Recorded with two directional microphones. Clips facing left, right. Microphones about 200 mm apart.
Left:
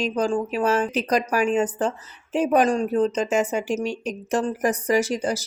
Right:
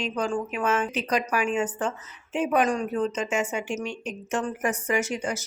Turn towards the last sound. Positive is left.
turn(degrees=35)  # may be behind; listen again after turning